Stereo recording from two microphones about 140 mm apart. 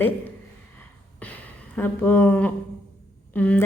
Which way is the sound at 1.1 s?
10° left (ahead or behind).